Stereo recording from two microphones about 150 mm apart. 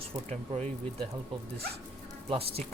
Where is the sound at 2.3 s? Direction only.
40° right (ahead or behind).